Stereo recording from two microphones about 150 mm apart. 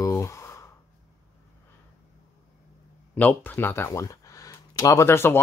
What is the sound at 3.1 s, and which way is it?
Speech, 10° left (ahead or behind).